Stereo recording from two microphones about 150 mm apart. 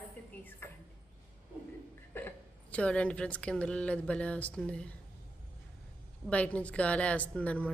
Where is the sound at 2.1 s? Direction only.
15° left (ahead or behind).